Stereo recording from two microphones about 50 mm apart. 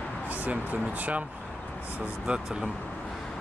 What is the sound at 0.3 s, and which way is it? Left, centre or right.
Speech, right.